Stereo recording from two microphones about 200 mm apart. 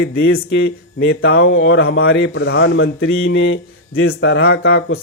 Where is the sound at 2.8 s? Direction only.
65° left (ahead or behind).